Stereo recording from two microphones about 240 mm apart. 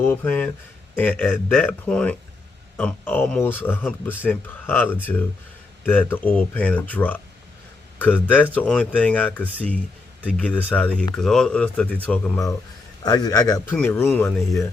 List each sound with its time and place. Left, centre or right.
0.0 s speech: centre
3.8 s speech: centre
4.3 s a man's voice: centre